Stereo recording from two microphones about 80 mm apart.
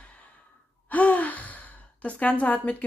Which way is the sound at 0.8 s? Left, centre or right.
Centre.